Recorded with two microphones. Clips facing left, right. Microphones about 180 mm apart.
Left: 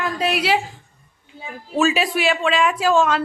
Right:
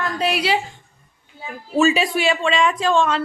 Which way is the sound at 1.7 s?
Centre (ahead or behind).